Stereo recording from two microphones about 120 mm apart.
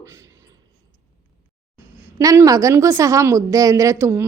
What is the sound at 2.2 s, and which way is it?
Speech, 30° right (ahead or behind).